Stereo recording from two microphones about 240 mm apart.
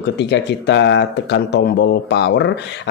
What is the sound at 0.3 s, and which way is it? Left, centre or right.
Speech, left.